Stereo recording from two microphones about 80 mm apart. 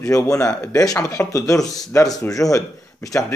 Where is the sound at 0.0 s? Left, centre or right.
Left.